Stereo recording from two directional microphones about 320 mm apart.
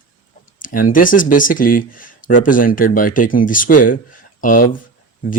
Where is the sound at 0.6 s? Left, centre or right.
Left.